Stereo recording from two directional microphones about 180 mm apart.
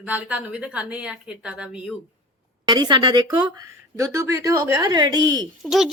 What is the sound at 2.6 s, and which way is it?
Speech, 25° right (ahead or behind).